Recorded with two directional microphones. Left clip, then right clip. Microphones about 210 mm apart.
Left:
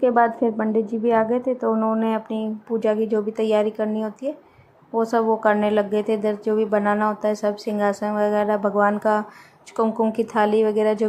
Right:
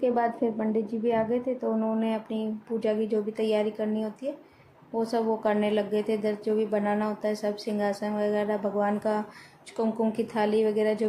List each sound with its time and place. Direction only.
0.0 s a woman's voice: 15° left (ahead or behind)